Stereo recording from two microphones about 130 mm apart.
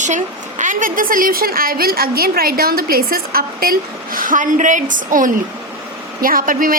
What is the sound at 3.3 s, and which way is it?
A woman's voice, 90° right.